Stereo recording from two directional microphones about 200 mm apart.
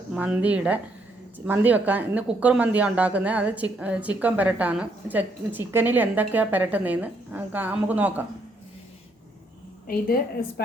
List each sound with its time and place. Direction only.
0.1 s speech: 5° right (ahead or behind)
9.8 s a woman's voice: 45° left (ahead or behind)